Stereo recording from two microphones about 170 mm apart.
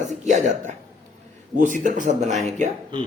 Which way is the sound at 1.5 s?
50° right (ahead or behind).